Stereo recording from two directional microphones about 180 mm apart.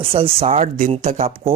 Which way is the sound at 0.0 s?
30° right (ahead or behind).